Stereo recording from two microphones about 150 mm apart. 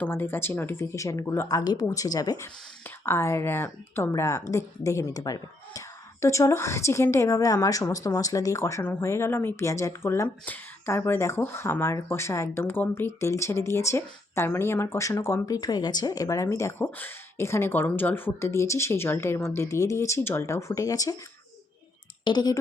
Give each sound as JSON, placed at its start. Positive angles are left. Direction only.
{"t": 0.0, "sound": "a woman's voice", "side_deg": 15}
{"t": 22.2, "sound": "speech", "side_deg": 30}